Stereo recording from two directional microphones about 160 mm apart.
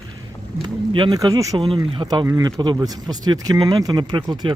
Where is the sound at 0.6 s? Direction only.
25° right (ahead or behind).